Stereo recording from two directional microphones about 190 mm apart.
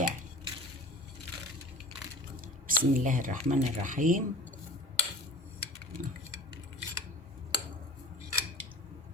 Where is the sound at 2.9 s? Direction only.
45° right (ahead or behind).